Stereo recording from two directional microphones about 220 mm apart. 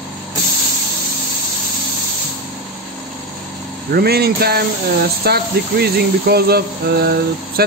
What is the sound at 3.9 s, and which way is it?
Speech, 45° right (ahead or behind).